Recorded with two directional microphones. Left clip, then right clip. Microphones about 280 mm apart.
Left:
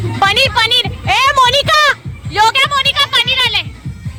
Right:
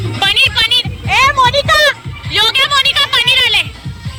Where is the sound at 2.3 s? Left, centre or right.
Centre.